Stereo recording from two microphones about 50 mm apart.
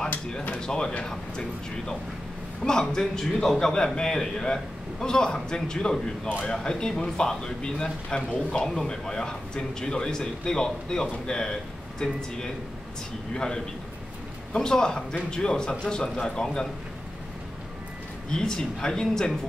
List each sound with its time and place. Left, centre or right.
0.6 s speech: centre
2.6 s a man's voice: centre
13.3 s a man's voice: centre
18.3 s a man's voice: centre